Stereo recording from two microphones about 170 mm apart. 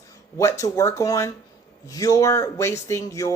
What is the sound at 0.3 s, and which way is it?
A woman's voice, 20° left (ahead or behind).